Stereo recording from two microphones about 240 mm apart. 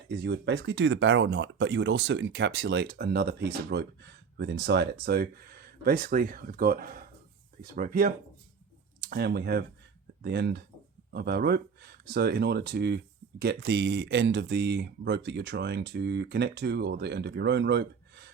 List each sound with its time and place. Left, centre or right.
0.3 s speech: right